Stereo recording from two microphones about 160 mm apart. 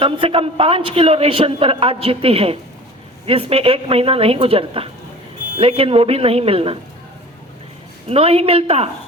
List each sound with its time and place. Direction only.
0.0 s a man's voice: 35° right (ahead or behind)
8.1 s a man's voice: 40° right (ahead or behind)